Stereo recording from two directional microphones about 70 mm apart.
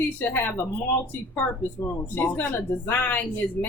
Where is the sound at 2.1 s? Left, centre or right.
Left.